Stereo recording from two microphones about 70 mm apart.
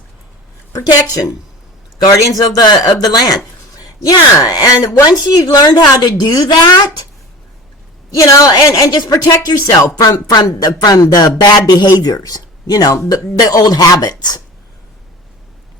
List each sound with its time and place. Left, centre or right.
2.0 s speech: left
5.0 s a woman's voice: left
8.1 s a woman's voice: left